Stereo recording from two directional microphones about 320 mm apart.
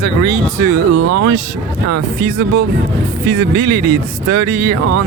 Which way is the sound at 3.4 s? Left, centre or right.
Right.